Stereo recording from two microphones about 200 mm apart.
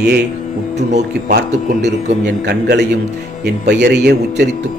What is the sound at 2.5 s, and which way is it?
Speech, 55° right (ahead or behind).